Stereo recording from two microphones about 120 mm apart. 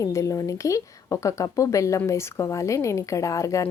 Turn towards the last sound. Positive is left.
turn(degrees=25)  # may be behind; listen again after turning